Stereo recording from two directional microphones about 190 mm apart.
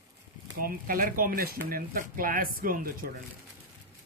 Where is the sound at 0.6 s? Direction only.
50° right (ahead or behind).